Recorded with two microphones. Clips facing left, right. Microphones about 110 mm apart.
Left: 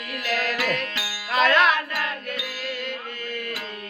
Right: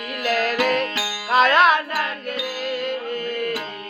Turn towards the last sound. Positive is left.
turn(degrees=-45)  # may be behind; listen again after turning